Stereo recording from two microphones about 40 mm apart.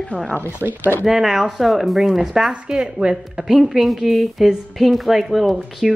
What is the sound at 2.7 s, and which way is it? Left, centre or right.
A woman's voice, centre.